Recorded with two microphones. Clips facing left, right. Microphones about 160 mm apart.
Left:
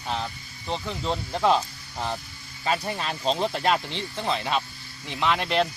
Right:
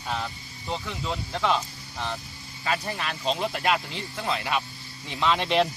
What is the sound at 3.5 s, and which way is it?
Speech, 5° right (ahead or behind).